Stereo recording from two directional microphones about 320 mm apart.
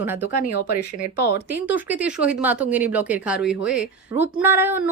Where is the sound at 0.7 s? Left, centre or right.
Left.